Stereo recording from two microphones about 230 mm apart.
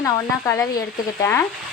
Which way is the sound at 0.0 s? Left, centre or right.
Centre.